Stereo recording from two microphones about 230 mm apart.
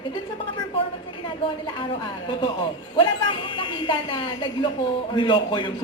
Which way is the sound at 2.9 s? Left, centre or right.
Left.